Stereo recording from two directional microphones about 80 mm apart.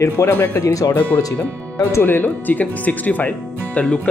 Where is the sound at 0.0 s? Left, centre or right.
Left.